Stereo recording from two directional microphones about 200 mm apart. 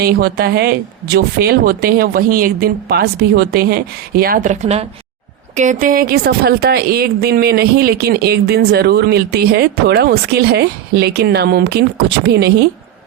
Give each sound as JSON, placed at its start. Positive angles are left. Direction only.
{"t": 0.0, "sound": "a woman's voice", "side_deg": -50}